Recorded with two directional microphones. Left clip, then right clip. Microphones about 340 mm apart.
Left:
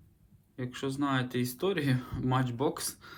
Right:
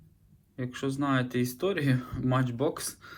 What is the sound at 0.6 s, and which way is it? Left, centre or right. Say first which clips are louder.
Speech: right 2 dB; centre.